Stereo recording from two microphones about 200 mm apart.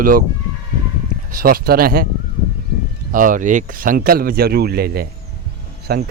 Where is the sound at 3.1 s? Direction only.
40° right (ahead or behind).